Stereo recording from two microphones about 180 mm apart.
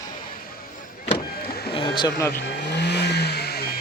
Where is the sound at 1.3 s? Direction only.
60° left (ahead or behind).